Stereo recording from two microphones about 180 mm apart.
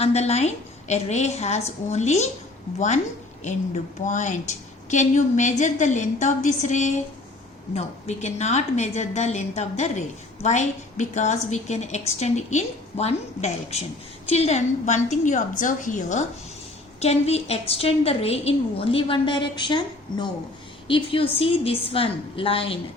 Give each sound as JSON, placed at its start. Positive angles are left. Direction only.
{"t": 0.0, "sound": "a woman's voice", "side_deg": 35}
{"t": 4.0, "sound": "a woman's voice", "side_deg": 40}